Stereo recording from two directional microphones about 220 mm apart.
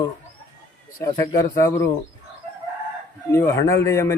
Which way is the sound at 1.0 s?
15° left (ahead or behind).